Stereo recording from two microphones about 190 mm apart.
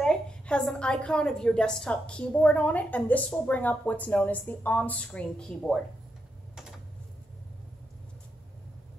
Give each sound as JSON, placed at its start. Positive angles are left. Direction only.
{"t": 0.0, "sound": "a woman's voice", "side_deg": 5}